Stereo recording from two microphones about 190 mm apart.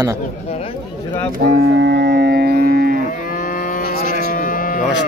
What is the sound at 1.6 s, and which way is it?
Music, 60° right (ahead or behind).